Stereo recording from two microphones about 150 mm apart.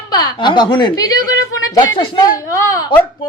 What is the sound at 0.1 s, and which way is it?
Speech, 25° left (ahead or behind).